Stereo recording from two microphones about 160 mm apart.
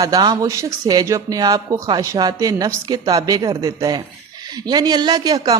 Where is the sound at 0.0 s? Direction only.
25° right (ahead or behind).